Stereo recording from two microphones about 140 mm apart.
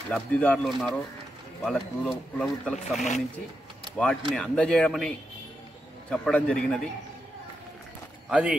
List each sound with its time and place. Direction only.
0.1 s speech: 10° left (ahead or behind)
8.3 s speech: 10° right (ahead or behind)